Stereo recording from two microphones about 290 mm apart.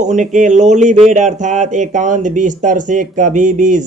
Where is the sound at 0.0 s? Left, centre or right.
Right.